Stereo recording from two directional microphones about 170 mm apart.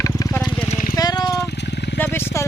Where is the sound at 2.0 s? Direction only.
15° left (ahead or behind).